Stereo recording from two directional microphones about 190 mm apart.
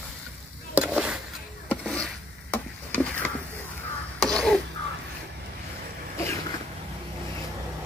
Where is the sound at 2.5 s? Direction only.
10° left (ahead or behind).